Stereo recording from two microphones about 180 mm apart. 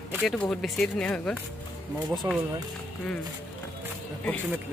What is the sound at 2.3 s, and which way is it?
Speech, 20° right (ahead or behind).